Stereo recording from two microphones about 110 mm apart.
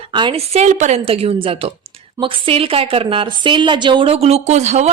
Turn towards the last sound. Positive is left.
turn(degrees=-90)